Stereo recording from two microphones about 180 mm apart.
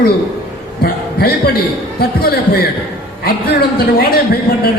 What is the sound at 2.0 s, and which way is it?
A man's voice, 55° left (ahead or behind).